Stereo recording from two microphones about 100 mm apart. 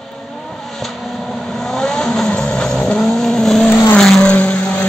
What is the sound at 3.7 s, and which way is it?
Vehicle, 20° left (ahead or behind).